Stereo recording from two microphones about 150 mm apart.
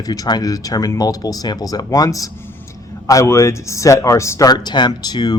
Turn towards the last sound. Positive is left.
turn(degrees=25)  # may be behind; listen again after turning